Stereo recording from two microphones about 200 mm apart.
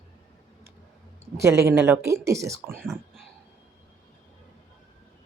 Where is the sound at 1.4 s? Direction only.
15° right (ahead or behind).